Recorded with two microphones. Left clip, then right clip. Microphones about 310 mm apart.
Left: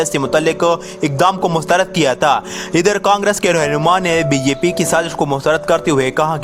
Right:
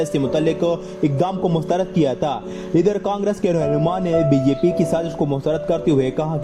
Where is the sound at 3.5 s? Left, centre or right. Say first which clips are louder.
Left 5 dB; left.